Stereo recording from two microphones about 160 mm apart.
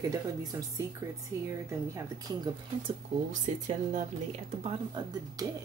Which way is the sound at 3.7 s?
50° right (ahead or behind).